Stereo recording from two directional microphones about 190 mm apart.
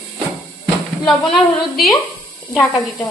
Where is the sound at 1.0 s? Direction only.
Centre (ahead or behind).